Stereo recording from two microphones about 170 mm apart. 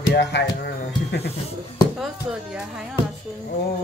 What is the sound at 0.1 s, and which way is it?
Music, 90° left.